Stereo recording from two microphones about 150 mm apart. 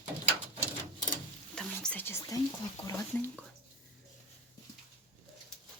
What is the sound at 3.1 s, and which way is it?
Speech, 10° left (ahead or behind).